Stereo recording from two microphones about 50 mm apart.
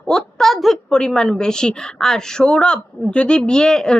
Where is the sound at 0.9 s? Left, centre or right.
Centre.